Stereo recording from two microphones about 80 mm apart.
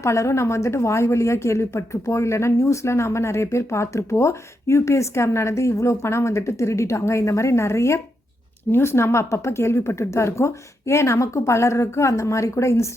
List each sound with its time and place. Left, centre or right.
0.0 s a woman's voice: left